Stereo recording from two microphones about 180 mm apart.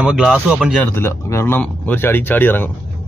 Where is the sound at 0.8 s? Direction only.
15° left (ahead or behind).